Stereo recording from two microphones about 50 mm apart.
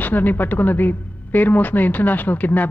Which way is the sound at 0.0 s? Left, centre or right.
Left.